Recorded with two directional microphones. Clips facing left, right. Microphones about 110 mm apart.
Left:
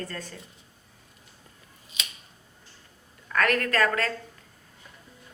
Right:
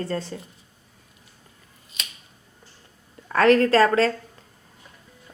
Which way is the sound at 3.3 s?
30° right (ahead or behind).